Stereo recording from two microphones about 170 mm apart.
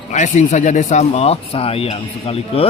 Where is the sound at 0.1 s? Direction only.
45° left (ahead or behind).